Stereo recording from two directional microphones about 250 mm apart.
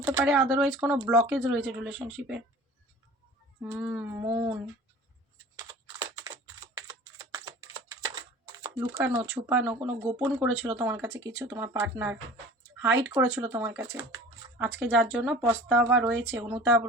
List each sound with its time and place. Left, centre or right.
0.3 s speech: centre
3.6 s speech: centre
5.5 s computer keyboard: centre
6.7 s typing: centre
8.0 s a sound: centre
9.1 s speech: centre